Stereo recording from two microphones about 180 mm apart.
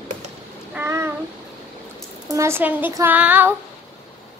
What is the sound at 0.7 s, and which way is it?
Child singing, 15° right (ahead or behind).